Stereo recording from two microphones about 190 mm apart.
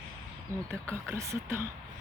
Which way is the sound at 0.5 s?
15° right (ahead or behind).